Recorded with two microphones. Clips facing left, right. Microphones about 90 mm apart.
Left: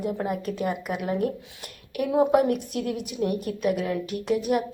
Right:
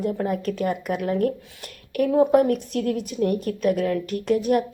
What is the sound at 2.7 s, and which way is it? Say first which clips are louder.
Speech: right 4 dB; 50° right (ahead or behind).